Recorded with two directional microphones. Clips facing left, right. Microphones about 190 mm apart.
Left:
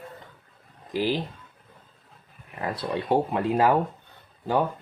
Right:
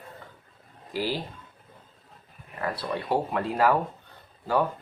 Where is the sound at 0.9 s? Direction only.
20° left (ahead or behind).